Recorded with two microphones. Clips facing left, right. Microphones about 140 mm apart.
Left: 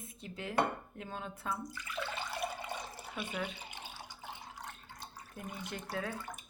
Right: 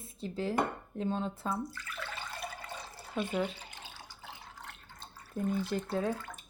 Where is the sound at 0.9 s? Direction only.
30° right (ahead or behind).